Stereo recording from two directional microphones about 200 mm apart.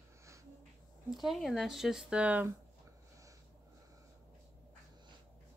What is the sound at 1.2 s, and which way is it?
Speech, centre (ahead or behind).